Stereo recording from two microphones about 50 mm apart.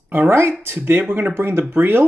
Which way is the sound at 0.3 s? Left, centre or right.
Right.